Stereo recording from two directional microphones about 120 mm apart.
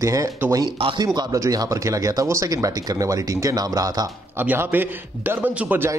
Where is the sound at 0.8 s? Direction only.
35° right (ahead or behind).